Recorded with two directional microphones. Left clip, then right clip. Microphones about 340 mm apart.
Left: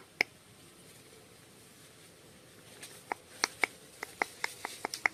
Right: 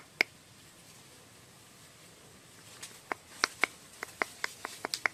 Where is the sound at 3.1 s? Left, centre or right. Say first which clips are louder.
Right 2 dB; centre.